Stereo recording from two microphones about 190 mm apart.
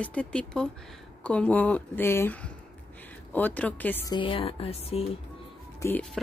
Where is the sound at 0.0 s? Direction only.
5° left (ahead or behind).